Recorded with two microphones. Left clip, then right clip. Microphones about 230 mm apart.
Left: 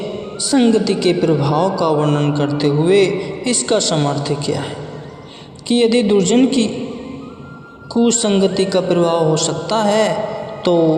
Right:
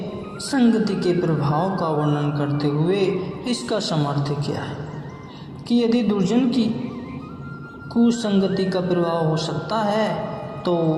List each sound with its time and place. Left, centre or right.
0.5 s a woman's voice: left
5.6 s a woman's voice: left
7.9 s a woman's voice: left
10.6 s music: left